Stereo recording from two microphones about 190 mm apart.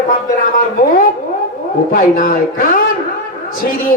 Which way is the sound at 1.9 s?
45° left (ahead or behind).